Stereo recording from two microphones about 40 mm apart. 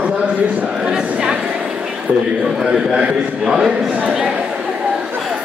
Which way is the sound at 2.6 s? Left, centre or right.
Centre.